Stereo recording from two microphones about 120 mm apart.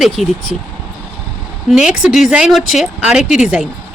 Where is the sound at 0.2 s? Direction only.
Centre (ahead or behind).